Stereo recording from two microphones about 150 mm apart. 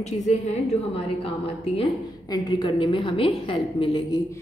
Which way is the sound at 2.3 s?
30° left (ahead or behind).